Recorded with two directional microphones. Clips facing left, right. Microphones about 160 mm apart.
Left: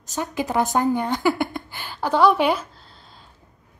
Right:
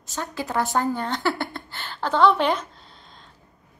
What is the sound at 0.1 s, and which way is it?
A woman's voice, 15° left (ahead or behind).